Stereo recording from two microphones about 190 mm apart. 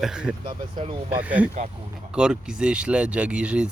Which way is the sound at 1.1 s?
10° right (ahead or behind).